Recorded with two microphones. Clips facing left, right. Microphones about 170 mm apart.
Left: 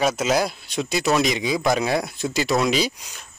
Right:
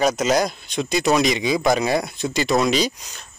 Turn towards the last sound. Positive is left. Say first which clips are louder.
# right 2 dB
turn(degrees=5)  # may be behind; listen again after turning